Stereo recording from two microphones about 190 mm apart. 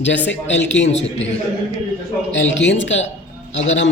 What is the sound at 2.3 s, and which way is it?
Speech, 70° left (ahead or behind).